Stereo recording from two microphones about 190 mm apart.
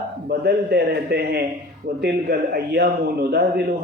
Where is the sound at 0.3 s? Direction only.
60° right (ahead or behind).